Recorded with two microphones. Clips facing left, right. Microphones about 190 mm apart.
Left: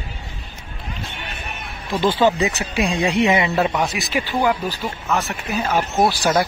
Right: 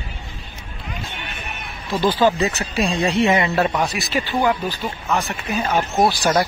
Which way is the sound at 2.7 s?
15° left (ahead or behind).